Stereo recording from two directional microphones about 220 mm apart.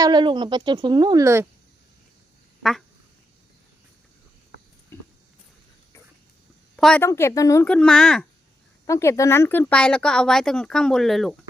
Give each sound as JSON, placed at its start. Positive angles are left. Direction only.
{"t": 0.0, "sound": "speech", "side_deg": -20}
{"t": 6.7, "sound": "speech", "side_deg": 5}
{"t": 8.9, "sound": "speech", "side_deg": 15}